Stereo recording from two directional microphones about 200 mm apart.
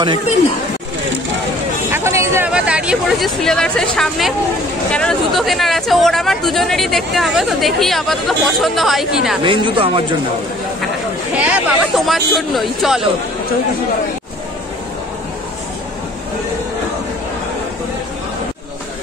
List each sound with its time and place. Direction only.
1.9 s speech: 15° right (ahead or behind)
9.4 s speech: 25° right (ahead or behind)
11.3 s speech: 5° right (ahead or behind)